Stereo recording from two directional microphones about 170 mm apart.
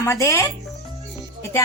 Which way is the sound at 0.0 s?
20° left (ahead or behind).